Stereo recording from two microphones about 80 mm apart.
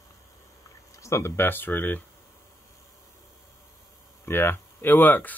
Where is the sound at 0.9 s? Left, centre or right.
Left.